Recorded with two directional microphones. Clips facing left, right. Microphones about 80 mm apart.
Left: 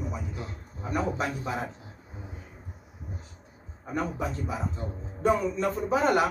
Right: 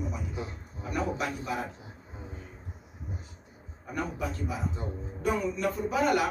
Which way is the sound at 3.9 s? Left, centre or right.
Left.